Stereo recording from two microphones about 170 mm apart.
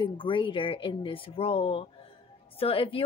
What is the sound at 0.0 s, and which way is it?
A woman's voice, 30° left (ahead or behind).